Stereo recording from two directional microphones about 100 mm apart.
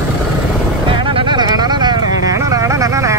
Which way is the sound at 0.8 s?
60° right (ahead or behind).